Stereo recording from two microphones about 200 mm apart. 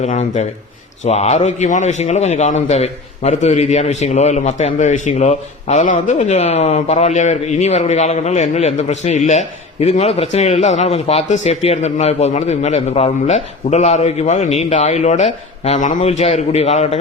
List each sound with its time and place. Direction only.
0.0 s a man's voice: 35° left (ahead or behind)